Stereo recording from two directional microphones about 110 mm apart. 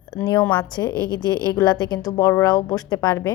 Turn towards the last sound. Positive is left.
turn(degrees=35)  # may be behind; listen again after turning